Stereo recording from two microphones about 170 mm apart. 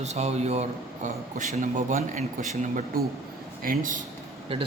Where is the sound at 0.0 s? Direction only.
40° right (ahead or behind).